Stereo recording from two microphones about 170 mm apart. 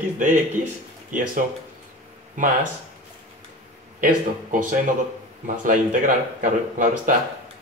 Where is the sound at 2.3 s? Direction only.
50° right (ahead or behind).